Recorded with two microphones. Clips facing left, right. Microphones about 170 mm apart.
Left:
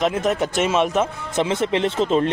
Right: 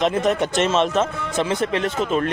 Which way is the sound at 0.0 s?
5° left (ahead or behind).